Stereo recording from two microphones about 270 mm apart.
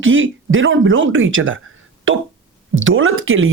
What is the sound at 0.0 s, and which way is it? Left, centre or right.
Speech, right.